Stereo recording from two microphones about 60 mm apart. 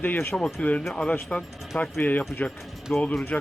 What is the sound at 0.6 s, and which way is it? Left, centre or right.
Speech, left.